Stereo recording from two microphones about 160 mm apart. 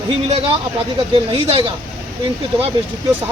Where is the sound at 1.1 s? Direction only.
35° right (ahead or behind).